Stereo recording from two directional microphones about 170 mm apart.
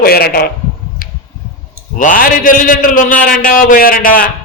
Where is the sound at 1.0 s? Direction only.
55° left (ahead or behind).